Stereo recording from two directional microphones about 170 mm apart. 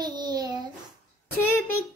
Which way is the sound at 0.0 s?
25° right (ahead or behind).